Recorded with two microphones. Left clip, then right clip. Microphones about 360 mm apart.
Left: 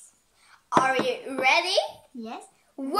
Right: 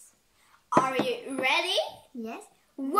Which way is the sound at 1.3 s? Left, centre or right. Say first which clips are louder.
Left 6 dB; left.